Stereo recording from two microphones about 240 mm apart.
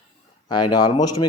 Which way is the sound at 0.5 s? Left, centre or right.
Centre.